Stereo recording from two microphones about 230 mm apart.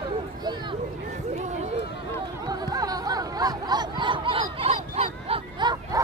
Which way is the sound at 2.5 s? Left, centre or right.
Centre.